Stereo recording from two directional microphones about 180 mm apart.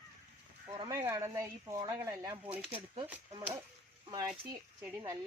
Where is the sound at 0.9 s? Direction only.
15° right (ahead or behind).